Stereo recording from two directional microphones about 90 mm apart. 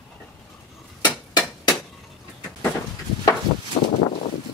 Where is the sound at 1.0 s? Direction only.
40° left (ahead or behind).